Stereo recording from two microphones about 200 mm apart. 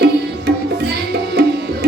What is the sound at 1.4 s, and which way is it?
Music, 55° right (ahead or behind).